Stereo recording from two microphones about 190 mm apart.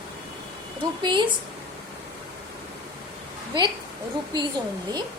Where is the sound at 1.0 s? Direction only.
25° right (ahead or behind).